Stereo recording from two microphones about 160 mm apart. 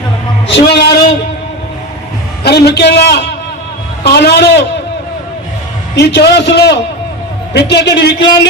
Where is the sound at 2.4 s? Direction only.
90° left.